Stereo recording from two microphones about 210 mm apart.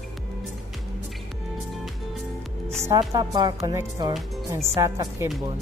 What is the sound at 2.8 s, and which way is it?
A woman's voice, 15° right (ahead or behind).